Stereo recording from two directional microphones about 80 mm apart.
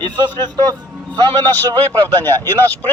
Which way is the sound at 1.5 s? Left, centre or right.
Left.